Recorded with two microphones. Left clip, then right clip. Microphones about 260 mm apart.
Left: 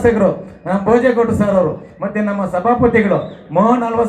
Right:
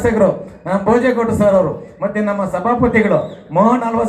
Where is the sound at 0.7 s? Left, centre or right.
Left.